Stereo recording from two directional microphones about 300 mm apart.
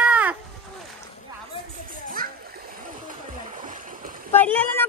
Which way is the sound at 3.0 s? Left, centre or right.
Right.